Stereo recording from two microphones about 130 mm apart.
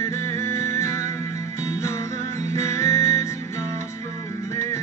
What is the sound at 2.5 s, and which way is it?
Music, 20° left (ahead or behind).